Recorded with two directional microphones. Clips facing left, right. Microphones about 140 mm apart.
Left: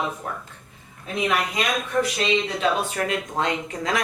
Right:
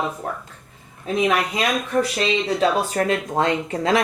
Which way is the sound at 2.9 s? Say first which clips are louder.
Right 5 dB; 35° right (ahead or behind).